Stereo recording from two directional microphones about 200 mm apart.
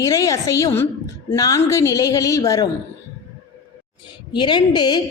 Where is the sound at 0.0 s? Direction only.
15° left (ahead or behind).